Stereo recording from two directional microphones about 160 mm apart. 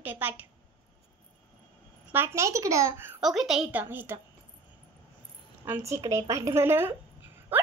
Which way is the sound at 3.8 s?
15° right (ahead or behind).